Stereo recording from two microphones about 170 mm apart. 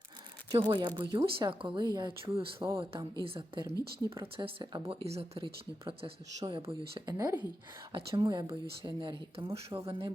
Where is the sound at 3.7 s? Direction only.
20° left (ahead or behind).